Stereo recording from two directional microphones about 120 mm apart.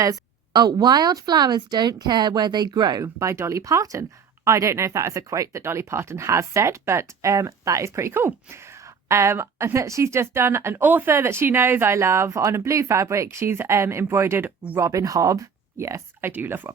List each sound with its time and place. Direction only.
0.0 s speech: 35° right (ahead or behind); by 16.7 s 20° right (ahead or behind)